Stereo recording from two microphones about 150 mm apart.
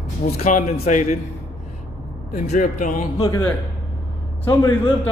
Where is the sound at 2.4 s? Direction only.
55° left (ahead or behind).